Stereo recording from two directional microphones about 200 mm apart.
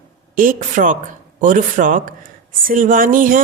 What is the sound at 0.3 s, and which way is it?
A woman's voice, 40° right (ahead or behind).